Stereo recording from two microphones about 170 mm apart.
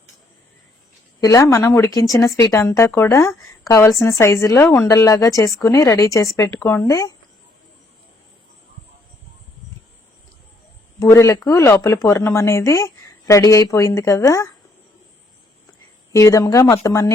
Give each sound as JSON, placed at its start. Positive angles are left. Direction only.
{"t": 1.2, "sound": "a woman's voice", "side_deg": 20}
{"t": 11.0, "sound": "speech", "side_deg": 15}
{"t": 16.1, "sound": "a woman's voice", "side_deg": 20}